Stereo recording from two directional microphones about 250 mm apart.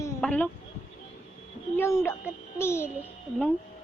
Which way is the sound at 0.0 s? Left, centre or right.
Centre.